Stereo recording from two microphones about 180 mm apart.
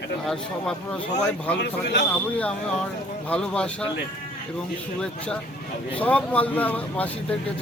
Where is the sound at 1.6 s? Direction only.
70° left (ahead or behind).